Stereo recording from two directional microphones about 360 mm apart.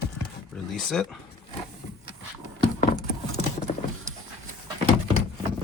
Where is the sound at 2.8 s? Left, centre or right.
Left.